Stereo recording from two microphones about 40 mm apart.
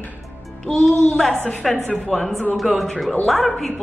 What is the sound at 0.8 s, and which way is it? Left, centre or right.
Speech, centre.